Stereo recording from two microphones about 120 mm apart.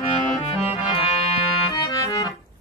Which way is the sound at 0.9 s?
50° left (ahead or behind).